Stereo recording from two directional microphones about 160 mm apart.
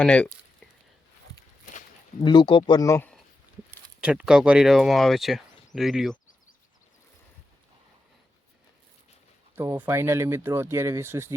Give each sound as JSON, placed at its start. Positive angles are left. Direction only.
{"t": 0.0, "sound": "speech", "side_deg": 5}
{"t": 2.2, "sound": "speech", "side_deg": 30}
{"t": 4.0, "sound": "speech", "side_deg": -5}
{"t": 9.6, "sound": "speech", "side_deg": -15}